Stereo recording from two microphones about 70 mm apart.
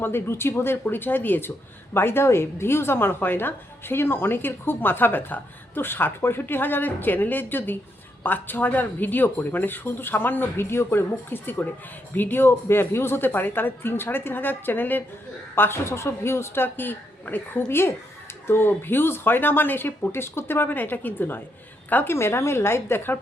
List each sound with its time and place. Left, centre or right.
0.0 s speech: left